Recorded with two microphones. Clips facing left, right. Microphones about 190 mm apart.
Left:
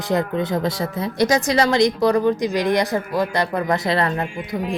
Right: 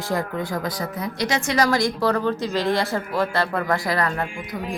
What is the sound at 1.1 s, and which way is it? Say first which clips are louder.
Speech: left 7 dB; 40° left (ahead or behind).